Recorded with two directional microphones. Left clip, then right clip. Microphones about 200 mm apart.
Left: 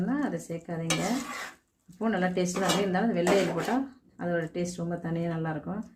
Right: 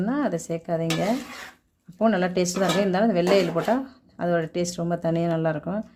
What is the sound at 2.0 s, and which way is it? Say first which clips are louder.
A woman's voice: right 6 dB; 60° right (ahead or behind).